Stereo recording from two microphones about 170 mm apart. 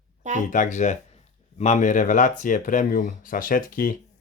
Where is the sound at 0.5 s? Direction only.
45° left (ahead or behind).